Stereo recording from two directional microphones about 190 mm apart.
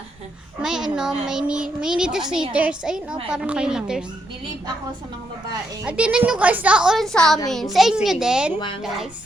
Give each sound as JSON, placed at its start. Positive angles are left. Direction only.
{"t": 0.6, "sound": "a woman's voice", "side_deg": -5}
{"t": 5.8, "sound": "a woman's voice", "side_deg": -5}
{"t": 8.5, "sound": "speech", "side_deg": 25}